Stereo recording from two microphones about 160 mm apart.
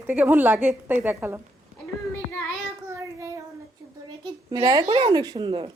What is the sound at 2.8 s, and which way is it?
Child singing, 20° right (ahead or behind).